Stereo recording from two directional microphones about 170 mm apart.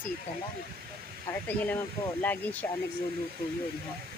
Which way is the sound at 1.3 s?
10° left (ahead or behind).